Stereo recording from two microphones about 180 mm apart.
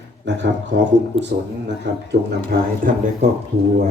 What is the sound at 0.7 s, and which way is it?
Speech, 85° right.